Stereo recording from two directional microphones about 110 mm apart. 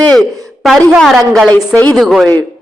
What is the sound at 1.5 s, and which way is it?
Speech, 15° left (ahead or behind).